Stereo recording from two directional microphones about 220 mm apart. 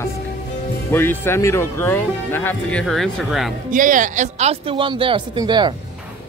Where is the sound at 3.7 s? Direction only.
35° right (ahead or behind); by 5.7 s 20° right (ahead or behind).